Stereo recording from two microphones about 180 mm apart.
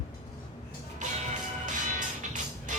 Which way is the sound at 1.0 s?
45° right (ahead or behind).